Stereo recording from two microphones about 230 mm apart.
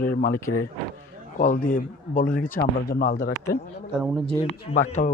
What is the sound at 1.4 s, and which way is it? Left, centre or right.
A man's voice, left.